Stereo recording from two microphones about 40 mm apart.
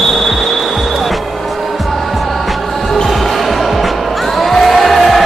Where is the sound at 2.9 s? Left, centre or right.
Centre.